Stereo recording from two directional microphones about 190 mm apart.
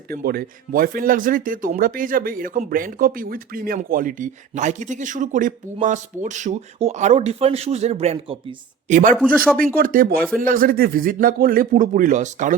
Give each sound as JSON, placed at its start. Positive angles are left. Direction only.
{"t": 0.1, "sound": "speech", "side_deg": -55}
{"t": 9.1, "sound": "speech", "side_deg": 0}
{"t": 9.6, "sound": "speech", "side_deg": -45}
{"t": 10.2, "sound": "speech", "side_deg": 5}
{"t": 10.4, "sound": "speech", "side_deg": -50}